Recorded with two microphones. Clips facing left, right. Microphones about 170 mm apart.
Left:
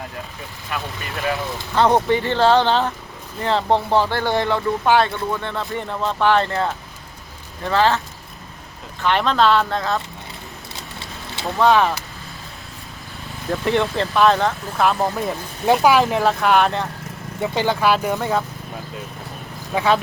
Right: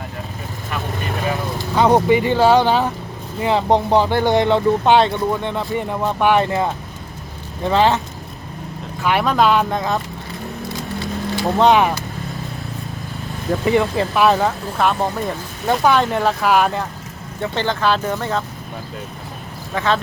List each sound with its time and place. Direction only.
1.7 s speech: 10° right (ahead or behind)
9.0 s speech: 10° right (ahead or behind)
11.5 s speech: 20° right (ahead or behind)
13.5 s speech: 5° right (ahead or behind)
17.4 s speech: 10° left (ahead or behind)
19.7 s speech: 10° left (ahead or behind)